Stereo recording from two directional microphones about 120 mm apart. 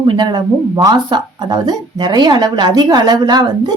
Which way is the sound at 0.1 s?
35° right (ahead or behind).